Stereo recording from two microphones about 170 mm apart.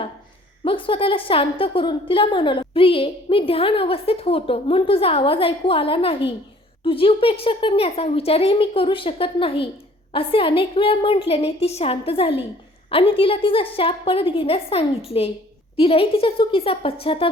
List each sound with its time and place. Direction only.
0.6 s a woman's voice: 30° left (ahead or behind)